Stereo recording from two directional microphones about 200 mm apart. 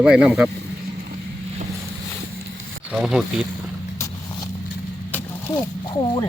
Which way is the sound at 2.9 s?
5° right (ahead or behind).